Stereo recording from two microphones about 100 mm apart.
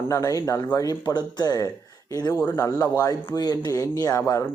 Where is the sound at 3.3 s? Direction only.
40° left (ahead or behind).